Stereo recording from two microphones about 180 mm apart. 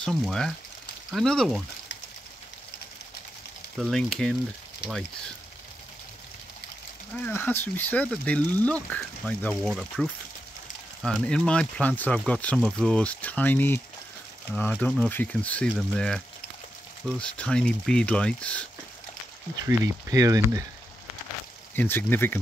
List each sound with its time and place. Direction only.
0.0 s speech: 5° left (ahead or behind)
3.7 s speech: centre (ahead or behind)
7.2 s speech: 10° left (ahead or behind)
19.6 s speech: 20° right (ahead or behind)
21.7 s speech: 10° left (ahead or behind)